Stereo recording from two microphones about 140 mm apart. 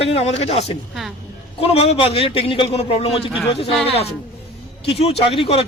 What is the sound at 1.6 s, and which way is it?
A man's voice, 45° left (ahead or behind).